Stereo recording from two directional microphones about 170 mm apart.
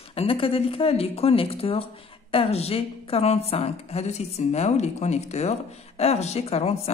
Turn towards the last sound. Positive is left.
turn(degrees=35)  # may be behind; listen again after turning